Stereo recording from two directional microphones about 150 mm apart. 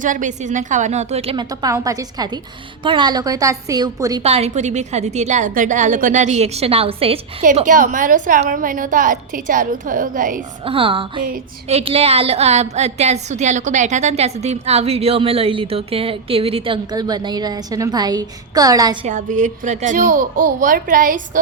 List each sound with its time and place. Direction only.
0.0 s a woman's voice: 60° right (ahead or behind)
1.4 s a woman's voice: 25° right (ahead or behind)
4.2 s a woman's voice: 45° right (ahead or behind)
7.6 s a woman's voice: 60° right (ahead or behind)
10.7 s a woman's voice: 35° right (ahead or behind)
19.0 s a woman's voice: 55° right (ahead or behind)